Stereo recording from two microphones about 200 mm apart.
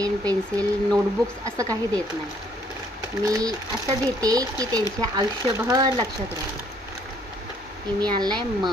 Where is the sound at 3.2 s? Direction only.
15° right (ahead or behind).